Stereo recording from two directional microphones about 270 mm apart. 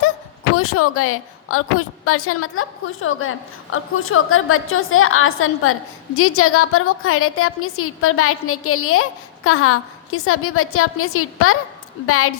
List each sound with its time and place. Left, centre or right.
0.5 s a woman's voice: left